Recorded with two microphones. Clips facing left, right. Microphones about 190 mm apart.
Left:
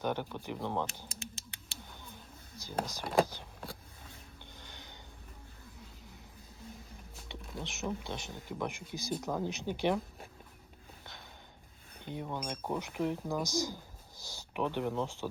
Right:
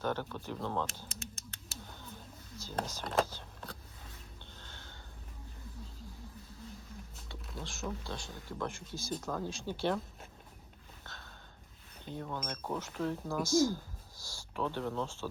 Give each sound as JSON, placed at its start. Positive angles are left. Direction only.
{"t": 0.0, "sound": "speech", "side_deg": 15}
{"t": 2.6, "sound": "speech", "side_deg": 15}
{"t": 4.5, "sound": "a sound", "side_deg": 15}
{"t": 7.6, "sound": "speech", "side_deg": 20}
{"t": 11.0, "sound": "sniff", "side_deg": 15}
{"t": 12.0, "sound": "speech", "side_deg": 15}